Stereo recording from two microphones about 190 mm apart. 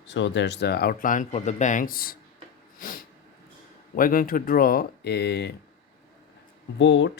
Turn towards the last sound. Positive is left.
turn(degrees=70)  # may be behind; listen again after turning